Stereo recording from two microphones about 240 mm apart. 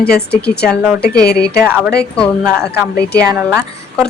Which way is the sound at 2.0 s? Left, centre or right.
Centre.